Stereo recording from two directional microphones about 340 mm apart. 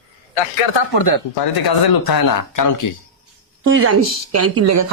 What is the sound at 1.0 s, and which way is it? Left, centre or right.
Speech, left.